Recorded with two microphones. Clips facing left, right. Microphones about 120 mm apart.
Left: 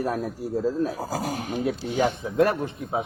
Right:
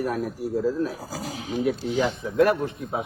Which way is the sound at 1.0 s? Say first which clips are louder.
Left 5 dB; 50° left (ahead or behind).